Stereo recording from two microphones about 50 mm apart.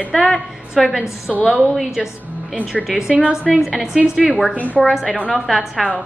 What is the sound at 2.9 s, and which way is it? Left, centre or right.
Speech, right.